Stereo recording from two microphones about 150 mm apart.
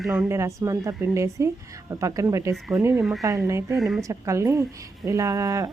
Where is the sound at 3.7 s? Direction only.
Centre (ahead or behind).